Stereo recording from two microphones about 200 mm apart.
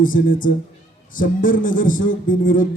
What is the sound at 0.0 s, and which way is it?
A man's voice, 45° left (ahead or behind).